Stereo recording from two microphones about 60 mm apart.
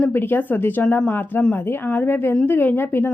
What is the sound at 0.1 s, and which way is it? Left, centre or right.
A woman's voice, left.